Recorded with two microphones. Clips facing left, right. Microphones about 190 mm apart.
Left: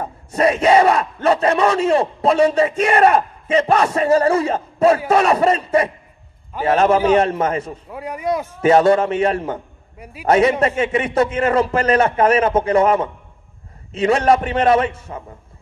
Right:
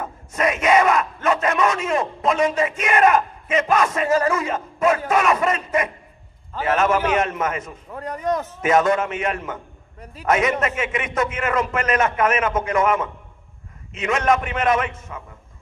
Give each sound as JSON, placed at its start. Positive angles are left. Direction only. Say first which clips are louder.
{"t": 0.0, "sound": "battle cry", "louder": "left 5 dB", "side_deg": 35}
{"t": 7.9, "sound": "speech", "louder": "left 1 dB", "side_deg": 10}
{"t": 8.5, "sound": "battle cry", "louder": "left 6 dB", "side_deg": 35}
{"t": 9.9, "sound": "a man's voice", "louder": "left 3 dB", "side_deg": 10}
{"t": 10.2, "sound": "battle cry", "louder": "left 5 dB", "side_deg": 35}